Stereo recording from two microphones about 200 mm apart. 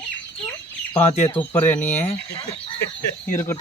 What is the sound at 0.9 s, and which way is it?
Speech, 35° left (ahead or behind).